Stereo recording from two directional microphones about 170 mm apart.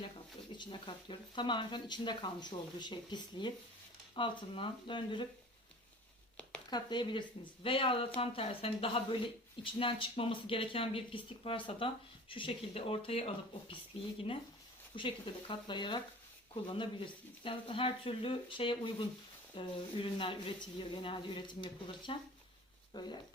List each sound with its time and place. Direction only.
0.5 s speech: 30° left (ahead or behind)
6.7 s speech: 25° left (ahead or behind)
17.4 s speech: 30° left (ahead or behind)